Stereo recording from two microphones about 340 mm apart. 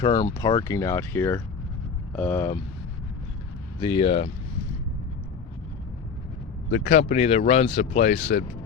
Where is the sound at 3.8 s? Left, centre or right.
Centre.